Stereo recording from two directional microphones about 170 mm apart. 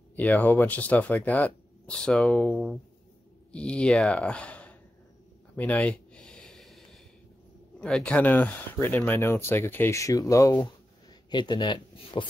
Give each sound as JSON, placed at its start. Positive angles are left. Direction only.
{"t": 0.1, "sound": "speech", "side_deg": 10}
{"t": 5.6, "sound": "a sound", "side_deg": 10}
{"t": 7.8, "sound": "speech", "side_deg": 5}